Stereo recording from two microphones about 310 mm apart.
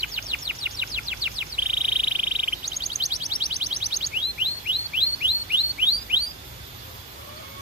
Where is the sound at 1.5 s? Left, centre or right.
Centre.